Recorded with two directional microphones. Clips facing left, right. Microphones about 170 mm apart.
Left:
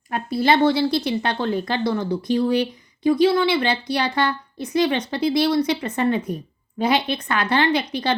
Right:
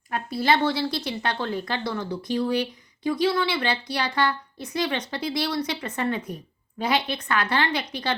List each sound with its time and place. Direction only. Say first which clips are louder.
0.1 s speech: left 4 dB; 20° left (ahead or behind)